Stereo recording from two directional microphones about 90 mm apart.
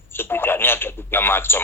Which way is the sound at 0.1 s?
25° left (ahead or behind).